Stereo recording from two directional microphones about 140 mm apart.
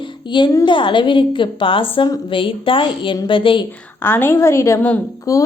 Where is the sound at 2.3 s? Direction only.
40° left (ahead or behind).